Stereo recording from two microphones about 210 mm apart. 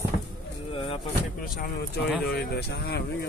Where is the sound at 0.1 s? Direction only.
35° left (ahead or behind).